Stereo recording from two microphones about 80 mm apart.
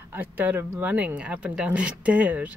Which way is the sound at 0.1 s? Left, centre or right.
Right.